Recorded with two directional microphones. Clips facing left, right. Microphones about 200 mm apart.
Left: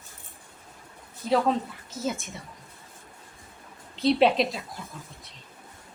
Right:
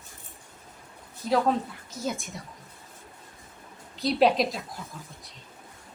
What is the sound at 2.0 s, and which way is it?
Speech, centre (ahead or behind).